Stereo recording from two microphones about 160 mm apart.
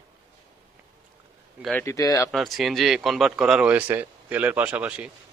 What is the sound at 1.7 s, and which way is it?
Speech, 20° left (ahead or behind).